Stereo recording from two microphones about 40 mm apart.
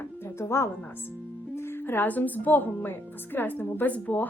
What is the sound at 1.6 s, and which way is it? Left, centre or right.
Music, left.